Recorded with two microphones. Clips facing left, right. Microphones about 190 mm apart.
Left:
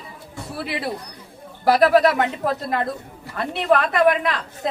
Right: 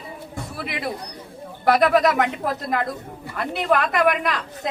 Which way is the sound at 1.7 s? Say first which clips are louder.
Left 2 dB; 30° left (ahead or behind).